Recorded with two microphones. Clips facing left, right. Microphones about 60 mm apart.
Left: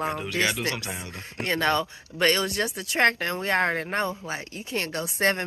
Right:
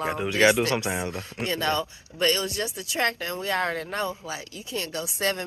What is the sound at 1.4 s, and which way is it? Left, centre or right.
Speech, left.